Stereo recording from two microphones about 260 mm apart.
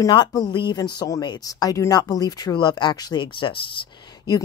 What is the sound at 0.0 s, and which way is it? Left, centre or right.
Speech, centre.